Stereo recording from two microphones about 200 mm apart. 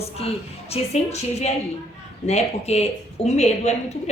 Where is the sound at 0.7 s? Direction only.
35° left (ahead or behind).